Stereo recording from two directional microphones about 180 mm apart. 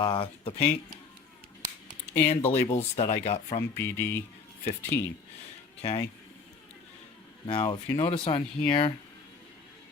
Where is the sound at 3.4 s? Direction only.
40° left (ahead or behind).